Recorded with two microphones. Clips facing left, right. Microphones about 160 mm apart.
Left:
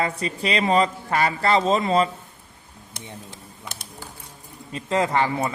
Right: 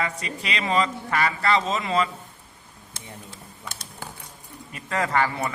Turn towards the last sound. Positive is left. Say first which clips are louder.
# left 2 dB
turn(degrees=20)  # may be behind; listen again after turning